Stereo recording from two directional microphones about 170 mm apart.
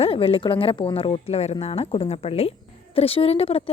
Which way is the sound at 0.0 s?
35° left (ahead or behind).